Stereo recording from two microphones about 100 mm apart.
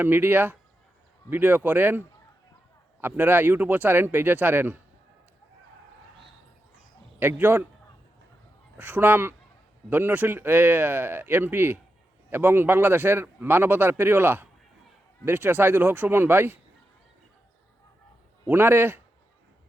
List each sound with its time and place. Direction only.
0.0 s a man's voice: 20° right (ahead or behind)
7.2 s a man's voice: 20° right (ahead or behind)
8.8 s a man's voice: 20° right (ahead or behind)
18.4 s a man's voice: 20° right (ahead or behind)